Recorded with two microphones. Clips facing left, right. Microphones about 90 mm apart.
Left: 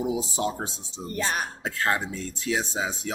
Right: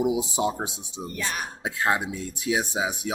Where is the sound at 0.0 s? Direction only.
20° right (ahead or behind).